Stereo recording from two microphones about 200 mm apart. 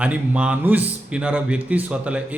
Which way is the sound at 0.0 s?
5° right (ahead or behind).